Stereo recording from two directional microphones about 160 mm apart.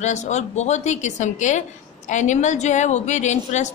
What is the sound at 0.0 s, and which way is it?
A woman's voice, 45° left (ahead or behind).